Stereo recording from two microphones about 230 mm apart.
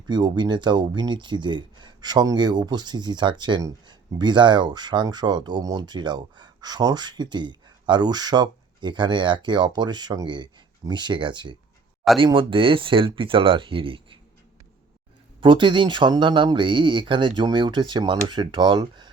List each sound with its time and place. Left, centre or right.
0.1 s speech: centre
15.4 s speech: right